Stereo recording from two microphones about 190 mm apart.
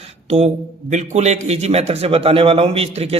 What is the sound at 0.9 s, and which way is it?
A man's voice, 35° right (ahead or behind).